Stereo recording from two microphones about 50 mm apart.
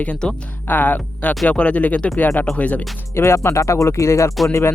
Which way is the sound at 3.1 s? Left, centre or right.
Left.